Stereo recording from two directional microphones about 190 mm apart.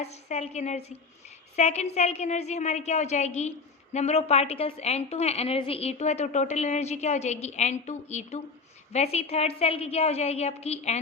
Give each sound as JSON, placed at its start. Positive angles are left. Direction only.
{"t": 0.0, "sound": "a woman's voice", "side_deg": 35}